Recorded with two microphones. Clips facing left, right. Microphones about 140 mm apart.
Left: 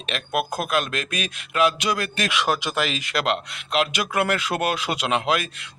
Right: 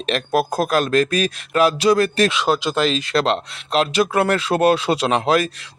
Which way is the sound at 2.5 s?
15° left (ahead or behind).